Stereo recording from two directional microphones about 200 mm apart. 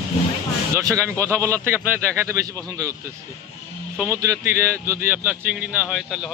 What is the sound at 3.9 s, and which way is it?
Speech, 10° right (ahead or behind).